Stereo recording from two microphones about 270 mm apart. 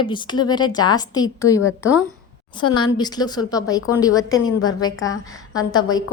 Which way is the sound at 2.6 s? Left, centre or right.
Left.